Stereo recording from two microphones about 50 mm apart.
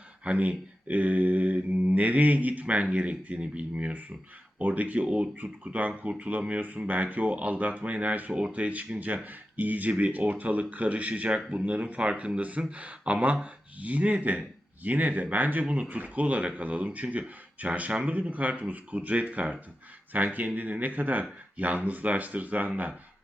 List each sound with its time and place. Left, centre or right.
0.3 s speech: right